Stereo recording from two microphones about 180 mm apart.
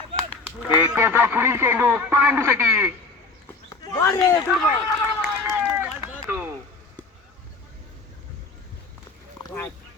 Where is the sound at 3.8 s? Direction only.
20° left (ahead or behind).